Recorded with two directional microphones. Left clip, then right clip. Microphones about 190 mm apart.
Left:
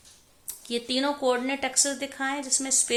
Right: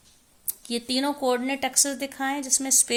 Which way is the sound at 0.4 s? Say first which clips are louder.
Even; 45° right (ahead or behind).